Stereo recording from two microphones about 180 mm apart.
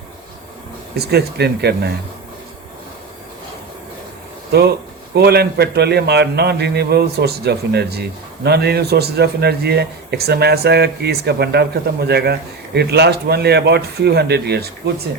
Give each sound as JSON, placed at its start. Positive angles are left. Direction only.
{"t": 0.9, "sound": "a man's voice", "side_deg": -65}
{"t": 4.5, "sound": "a man's voice", "side_deg": -65}